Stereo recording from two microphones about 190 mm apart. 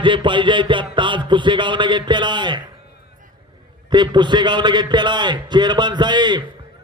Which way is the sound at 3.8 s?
25° right (ahead or behind).